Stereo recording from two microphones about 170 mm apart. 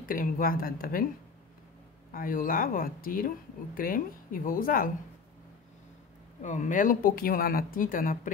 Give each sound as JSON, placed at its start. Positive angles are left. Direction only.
{"t": 0.1, "sound": "speech", "side_deg": 55}
{"t": 2.1, "sound": "speech", "side_deg": 55}
{"t": 6.4, "sound": "speech", "side_deg": 45}